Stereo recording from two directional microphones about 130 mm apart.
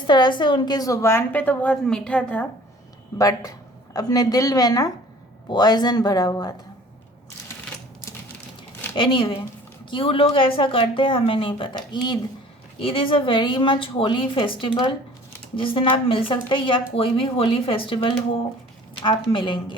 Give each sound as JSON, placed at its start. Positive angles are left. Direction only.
{"t": 0.1, "sound": "a woman's voice", "side_deg": 35}
{"t": 3.2, "sound": "a woman's voice", "side_deg": 30}
{"t": 9.0, "sound": "speech", "side_deg": 40}
{"t": 19.3, "sound": "speech", "side_deg": 40}